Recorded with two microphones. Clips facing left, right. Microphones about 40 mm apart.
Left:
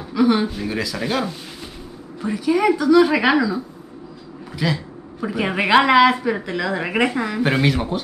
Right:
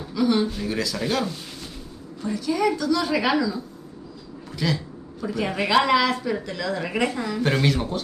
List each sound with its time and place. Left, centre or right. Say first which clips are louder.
0.1 s a man's voice: left 4 dB; left
0.5 s speech: left 2 dB; centre
2.2 s speech: left 5 dB; left
5.2 s speech: left 4 dB; left
7.4 s speech: left 2 dB; centre